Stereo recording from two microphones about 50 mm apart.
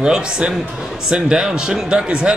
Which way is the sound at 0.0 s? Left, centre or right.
Centre.